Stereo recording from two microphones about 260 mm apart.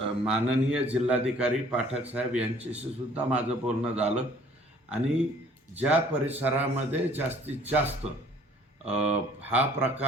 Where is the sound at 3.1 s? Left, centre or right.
Centre.